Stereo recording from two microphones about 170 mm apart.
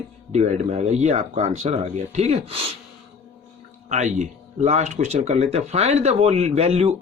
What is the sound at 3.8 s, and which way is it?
Speech, 45° right (ahead or behind).